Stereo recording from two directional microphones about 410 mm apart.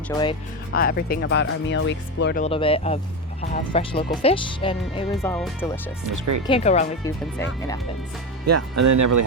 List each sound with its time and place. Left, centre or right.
0.1 s speech: centre
0.7 s speech: left
5.1 s speech: centre
6.1 s speech: right
6.5 s speech: centre
8.4 s speech: right